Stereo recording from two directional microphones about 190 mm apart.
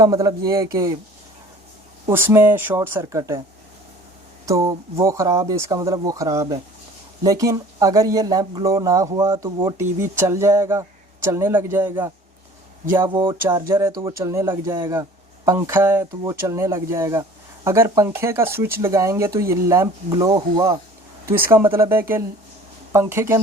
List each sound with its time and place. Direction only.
0.0 s speech: 20° right (ahead or behind)
2.0 s speech: 10° right (ahead or behind)
4.4 s speech: 15° right (ahead or behind)
13.4 s speech: 20° right (ahead or behind)